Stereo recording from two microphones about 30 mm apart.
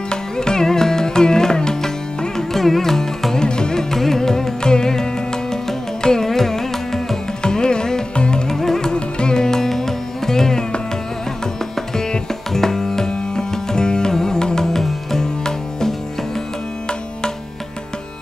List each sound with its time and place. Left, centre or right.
0.1 s music: left
2.3 s carnatic music: centre
3.3 s music: left
3.9 s carnatic music: centre
7.4 s music: left
8.5 s music: centre
8.9 s music: left
12.0 s music: centre
14.7 s music: centre